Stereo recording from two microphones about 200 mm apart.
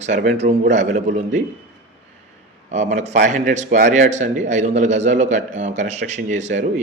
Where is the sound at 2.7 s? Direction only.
35° right (ahead or behind).